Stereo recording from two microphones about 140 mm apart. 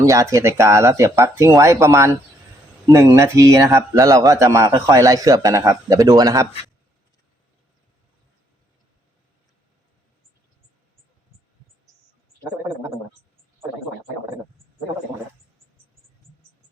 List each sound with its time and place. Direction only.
0.0 s a man's voice: 20° right (ahead or behind)